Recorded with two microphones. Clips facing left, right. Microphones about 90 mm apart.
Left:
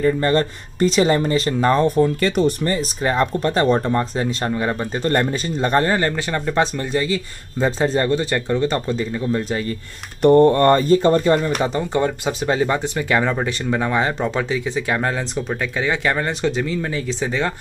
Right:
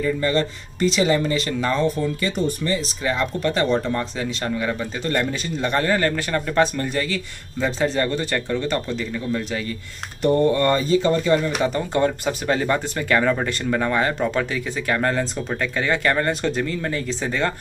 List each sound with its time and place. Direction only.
0.0 s speech: 45° left (ahead or behind)
2.2 s speech: 85° left
2.6 s speech: 45° left (ahead or behind)
10.2 s speech: 50° left (ahead or behind)
12.3 s speech: 20° left (ahead or behind)